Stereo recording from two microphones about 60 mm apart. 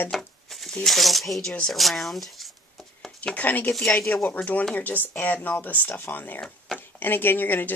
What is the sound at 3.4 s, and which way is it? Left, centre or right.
Speech, left.